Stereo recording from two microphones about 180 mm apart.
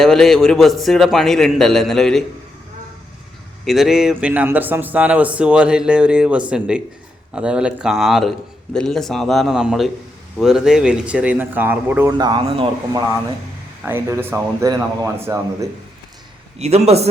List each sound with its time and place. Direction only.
0.0 s a man's voice: centre (ahead or behind)
3.7 s a man's voice: centre (ahead or behind)
12.1 s speech: 25° right (ahead or behind)
13.8 s speech: 15° right (ahead or behind)
16.6 s a man's voice: 35° right (ahead or behind)